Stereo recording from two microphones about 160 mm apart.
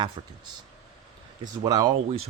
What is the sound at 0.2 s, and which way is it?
Speech, 30° right (ahead or behind).